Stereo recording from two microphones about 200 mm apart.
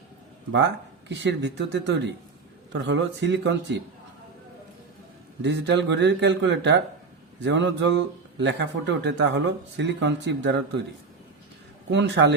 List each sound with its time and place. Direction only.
0.5 s a man's voice: 60° right (ahead or behind)
5.4 s a man's voice: 60° right (ahead or behind)
11.9 s a man's voice: 60° right (ahead or behind)